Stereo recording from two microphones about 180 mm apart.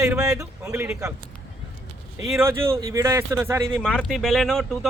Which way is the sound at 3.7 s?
5° left (ahead or behind).